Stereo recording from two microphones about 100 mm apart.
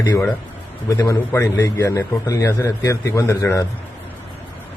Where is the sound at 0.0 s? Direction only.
40° left (ahead or behind).